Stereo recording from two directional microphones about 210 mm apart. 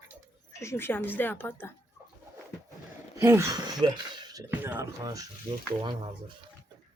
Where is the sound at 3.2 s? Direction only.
15° right (ahead or behind).